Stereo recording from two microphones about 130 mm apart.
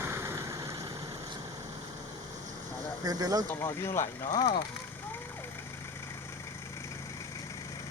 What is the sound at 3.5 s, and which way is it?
Speech, 20° left (ahead or behind).